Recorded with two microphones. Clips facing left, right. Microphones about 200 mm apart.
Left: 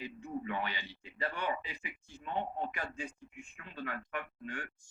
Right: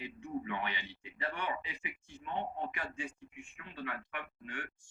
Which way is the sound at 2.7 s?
40° left (ahead or behind).